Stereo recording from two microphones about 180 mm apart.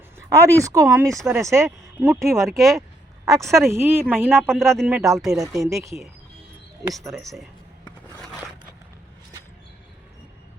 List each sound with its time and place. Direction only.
0.2 s speech: 15° right (ahead or behind)
2.4 s speech: centre (ahead or behind)
3.7 s speech: 15° right (ahead or behind)
4.4 s speech: 5° left (ahead or behind)
5.4 s speech: 20° right (ahead or behind)
7.1 s speech: centre (ahead or behind)